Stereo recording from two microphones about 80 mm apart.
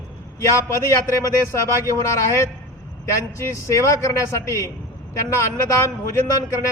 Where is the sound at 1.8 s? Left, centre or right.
Left.